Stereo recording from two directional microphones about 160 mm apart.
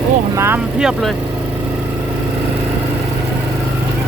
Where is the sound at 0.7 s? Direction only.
5° right (ahead or behind).